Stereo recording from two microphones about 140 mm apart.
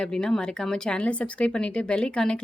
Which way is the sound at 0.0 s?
5° left (ahead or behind).